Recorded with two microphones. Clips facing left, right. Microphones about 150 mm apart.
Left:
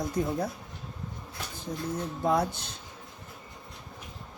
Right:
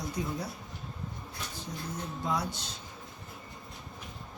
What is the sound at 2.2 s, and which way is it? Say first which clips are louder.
Speech: left 7 dB; 55° left (ahead or behind).